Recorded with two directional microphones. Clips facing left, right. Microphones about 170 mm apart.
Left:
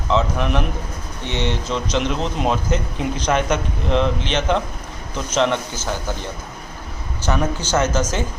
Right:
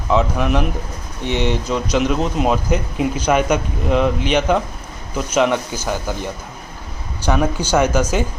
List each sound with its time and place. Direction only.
0.1 s speech: 10° right (ahead or behind)
7.2 s speech: 10° right (ahead or behind)